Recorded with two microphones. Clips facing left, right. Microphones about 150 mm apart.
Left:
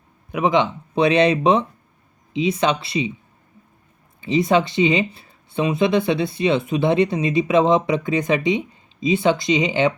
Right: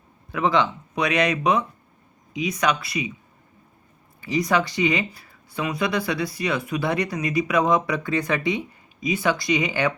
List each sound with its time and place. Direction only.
0.3 s speech: 20° left (ahead or behind)
4.2 s speech: 25° left (ahead or behind)